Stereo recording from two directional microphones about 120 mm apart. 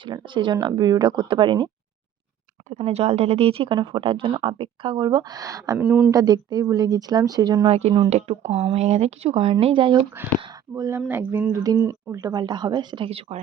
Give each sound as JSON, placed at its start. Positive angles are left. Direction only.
{"t": 0.0, "sound": "speech", "side_deg": -40}
{"t": 2.6, "sound": "speech", "side_deg": -60}
{"t": 5.7, "sound": "speech", "side_deg": -10}
{"t": 6.1, "sound": "speech", "side_deg": -30}
{"t": 7.7, "sound": "speech", "side_deg": -60}
{"t": 10.8, "sound": "speech", "side_deg": -25}
{"t": 11.5, "sound": "speech", "side_deg": -30}
{"t": 11.8, "sound": "speech", "side_deg": -20}
{"t": 13.1, "sound": "speech", "side_deg": -55}